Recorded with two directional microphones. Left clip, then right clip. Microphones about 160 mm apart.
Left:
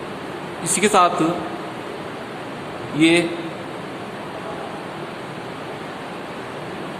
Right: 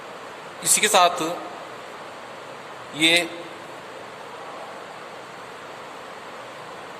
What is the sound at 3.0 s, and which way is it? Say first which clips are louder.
Speech: left 2 dB; 45° right (ahead or behind).